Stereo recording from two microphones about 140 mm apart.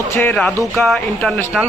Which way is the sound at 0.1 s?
15° left (ahead or behind).